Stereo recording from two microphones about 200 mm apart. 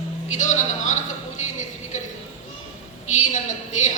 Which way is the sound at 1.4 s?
35° left (ahead or behind).